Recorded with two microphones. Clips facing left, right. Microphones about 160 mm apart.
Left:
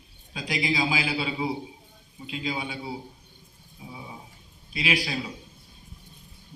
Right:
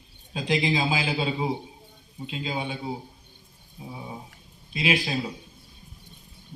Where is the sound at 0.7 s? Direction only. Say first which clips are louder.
Right 1 dB; 35° right (ahead or behind).